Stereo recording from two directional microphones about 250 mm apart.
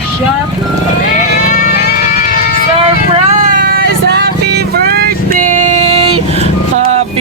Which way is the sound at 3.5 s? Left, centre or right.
Right.